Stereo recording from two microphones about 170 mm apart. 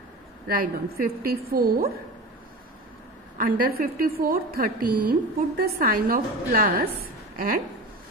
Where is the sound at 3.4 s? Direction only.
55° right (ahead or behind).